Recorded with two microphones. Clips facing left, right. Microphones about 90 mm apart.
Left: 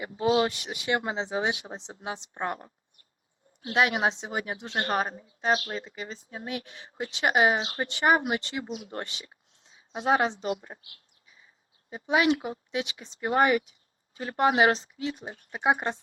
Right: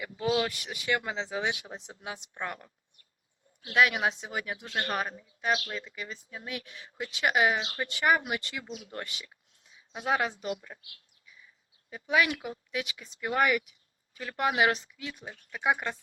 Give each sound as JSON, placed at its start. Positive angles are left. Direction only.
{"t": 0.0, "sound": "speech", "side_deg": 30}